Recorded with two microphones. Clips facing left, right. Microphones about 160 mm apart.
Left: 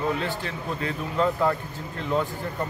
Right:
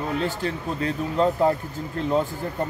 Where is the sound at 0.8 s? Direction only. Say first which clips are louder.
Right 3 dB; 35° right (ahead or behind).